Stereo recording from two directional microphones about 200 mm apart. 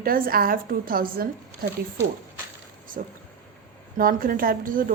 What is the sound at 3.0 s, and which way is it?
A woman's voice, 45° right (ahead or behind).